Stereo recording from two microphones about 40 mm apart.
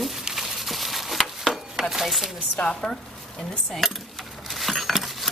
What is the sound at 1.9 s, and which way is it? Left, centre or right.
Speech, centre.